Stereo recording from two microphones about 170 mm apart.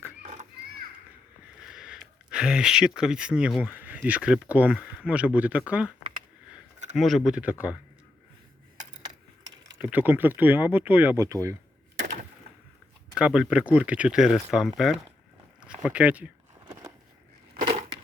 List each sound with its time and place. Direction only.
0.2 s children playing: 45° right (ahead or behind)
1.6 s speech: 5° right (ahead or behind)
6.9 s speech: centre (ahead or behind)
9.7 s speech: 10° right (ahead or behind)
13.1 s speech: 5° right (ahead or behind)